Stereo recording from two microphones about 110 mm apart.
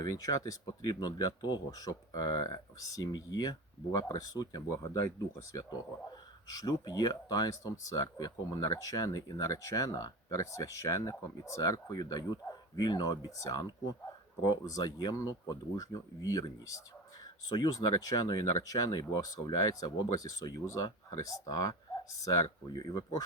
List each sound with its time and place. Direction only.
0.0 s speech: 35° left (ahead or behind)
6.1 s speech: 35° left (ahead or behind)